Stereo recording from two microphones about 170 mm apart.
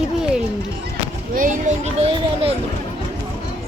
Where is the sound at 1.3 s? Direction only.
50° right (ahead or behind).